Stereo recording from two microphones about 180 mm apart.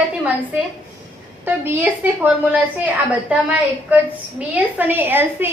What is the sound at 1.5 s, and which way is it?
A woman's voice, 10° right (ahead or behind).